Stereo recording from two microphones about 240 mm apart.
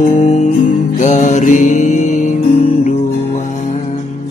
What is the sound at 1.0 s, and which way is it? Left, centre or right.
Mantra, left.